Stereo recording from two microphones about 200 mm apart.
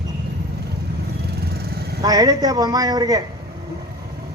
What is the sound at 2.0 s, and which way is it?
A man's voice, 20° right (ahead or behind).